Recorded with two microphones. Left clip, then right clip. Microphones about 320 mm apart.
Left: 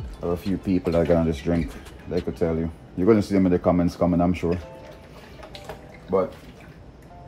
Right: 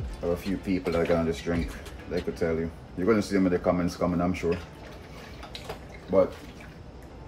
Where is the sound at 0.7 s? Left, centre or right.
Left.